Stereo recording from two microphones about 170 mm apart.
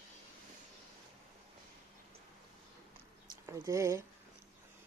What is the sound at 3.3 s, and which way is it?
Speech, 20° right (ahead or behind).